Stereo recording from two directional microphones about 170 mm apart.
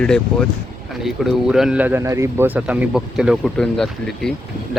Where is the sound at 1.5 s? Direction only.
5° right (ahead or behind).